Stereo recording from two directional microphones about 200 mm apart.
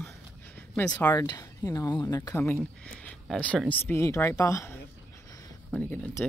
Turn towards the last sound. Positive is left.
turn(degrees=10)  # may be behind; listen again after turning